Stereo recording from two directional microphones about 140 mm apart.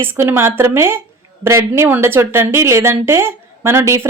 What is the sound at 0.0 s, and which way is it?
A woman's voice, 15° right (ahead or behind).